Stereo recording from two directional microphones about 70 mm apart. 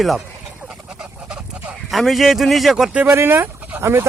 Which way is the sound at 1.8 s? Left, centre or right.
Centre.